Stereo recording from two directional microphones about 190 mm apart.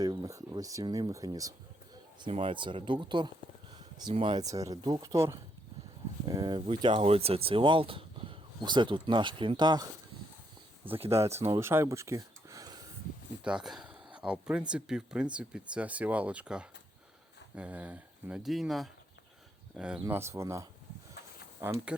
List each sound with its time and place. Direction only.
0.0 s speech: 20° right (ahead or behind)
11.1 s speech: 15° right (ahead or behind)
13.4 s speech: 5° right (ahead or behind)